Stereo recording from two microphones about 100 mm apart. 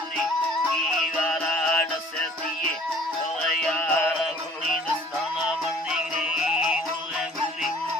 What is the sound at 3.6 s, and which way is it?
Music, 10° left (ahead or behind).